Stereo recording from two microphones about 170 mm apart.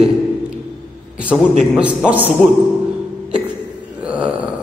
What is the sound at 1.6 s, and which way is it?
Speech, 5° right (ahead or behind).